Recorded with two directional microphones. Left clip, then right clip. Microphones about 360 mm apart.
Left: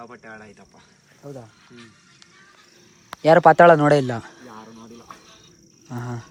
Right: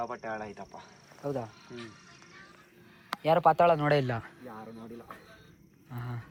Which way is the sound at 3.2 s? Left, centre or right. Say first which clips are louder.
Left 11 dB; centre.